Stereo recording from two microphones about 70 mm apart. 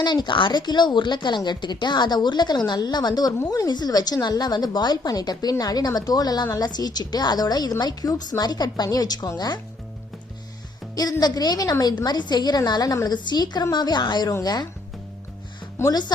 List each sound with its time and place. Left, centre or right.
0.0 s a woman's voice: left
8.7 s a woman's voice: left
10.9 s a woman's voice: left
12.0 s a woman's voice: left
13.1 s speech: left
14.4 s a woman's voice: left
15.9 s speech: left